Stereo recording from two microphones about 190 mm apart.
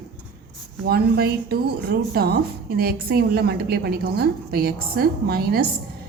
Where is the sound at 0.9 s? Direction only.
55° right (ahead or behind).